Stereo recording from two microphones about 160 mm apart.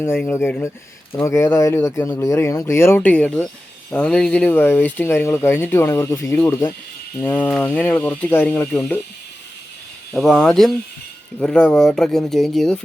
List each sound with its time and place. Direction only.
0.0 s speech: 15° left (ahead or behind)
10.1 s speech: 5° left (ahead or behind)